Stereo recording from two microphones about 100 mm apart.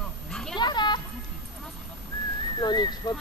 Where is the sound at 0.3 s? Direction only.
5° left (ahead or behind).